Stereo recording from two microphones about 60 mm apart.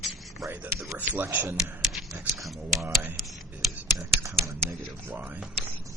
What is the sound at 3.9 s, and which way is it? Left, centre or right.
Speech, right.